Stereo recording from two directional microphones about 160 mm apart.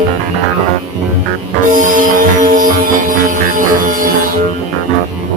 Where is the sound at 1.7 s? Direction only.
55° right (ahead or behind).